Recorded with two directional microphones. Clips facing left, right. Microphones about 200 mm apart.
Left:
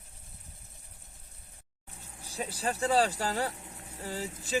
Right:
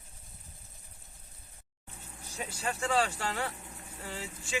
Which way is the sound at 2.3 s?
35° left (ahead or behind).